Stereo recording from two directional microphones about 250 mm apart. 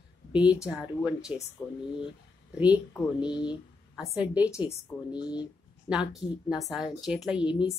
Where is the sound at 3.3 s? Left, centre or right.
Centre.